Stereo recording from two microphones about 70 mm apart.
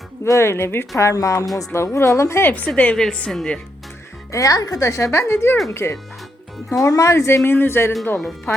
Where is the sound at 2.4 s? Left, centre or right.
Left.